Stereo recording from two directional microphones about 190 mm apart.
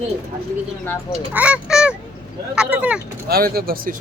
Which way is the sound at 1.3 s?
5° right (ahead or behind).